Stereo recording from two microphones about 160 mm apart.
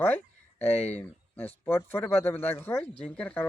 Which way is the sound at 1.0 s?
10° left (ahead or behind).